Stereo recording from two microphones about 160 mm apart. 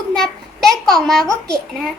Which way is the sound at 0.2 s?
Centre (ahead or behind).